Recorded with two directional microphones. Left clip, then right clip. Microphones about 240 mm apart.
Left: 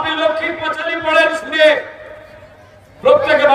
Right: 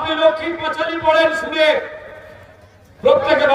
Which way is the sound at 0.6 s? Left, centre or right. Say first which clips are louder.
Right 3 dB; centre.